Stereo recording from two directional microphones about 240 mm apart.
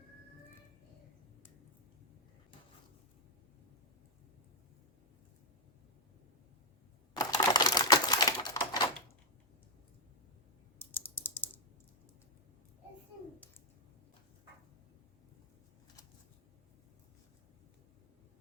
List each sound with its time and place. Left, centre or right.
7.2 s typewriter: centre
10.8 s typing: centre